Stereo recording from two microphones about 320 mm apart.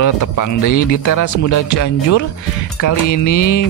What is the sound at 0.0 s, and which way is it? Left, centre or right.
Speech, left.